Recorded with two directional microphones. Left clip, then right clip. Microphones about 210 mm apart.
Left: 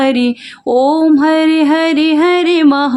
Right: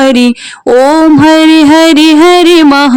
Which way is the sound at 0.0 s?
35° right (ahead or behind).